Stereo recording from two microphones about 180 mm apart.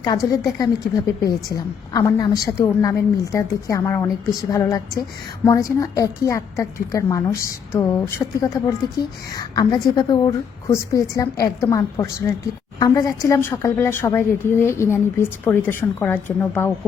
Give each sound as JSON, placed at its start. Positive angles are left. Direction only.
{"t": 0.0, "sound": "a woman's voice", "side_deg": 20}